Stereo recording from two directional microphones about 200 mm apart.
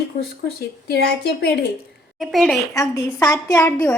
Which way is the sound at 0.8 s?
55° left (ahead or behind).